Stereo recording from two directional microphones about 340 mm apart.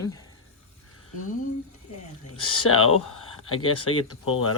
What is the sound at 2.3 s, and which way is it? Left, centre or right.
Speech, left.